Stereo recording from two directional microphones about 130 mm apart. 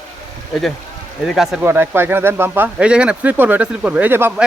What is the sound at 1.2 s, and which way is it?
Speech, centre (ahead or behind).